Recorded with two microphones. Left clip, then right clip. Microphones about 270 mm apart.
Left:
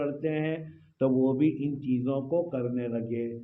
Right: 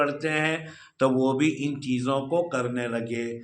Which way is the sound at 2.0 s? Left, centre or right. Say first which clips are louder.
Right 5 dB; right.